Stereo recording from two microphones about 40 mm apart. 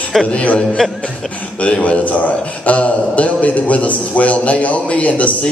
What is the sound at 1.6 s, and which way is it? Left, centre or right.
A man's voice, left.